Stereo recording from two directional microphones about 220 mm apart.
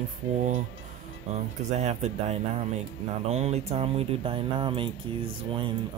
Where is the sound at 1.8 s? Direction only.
30° right (ahead or behind).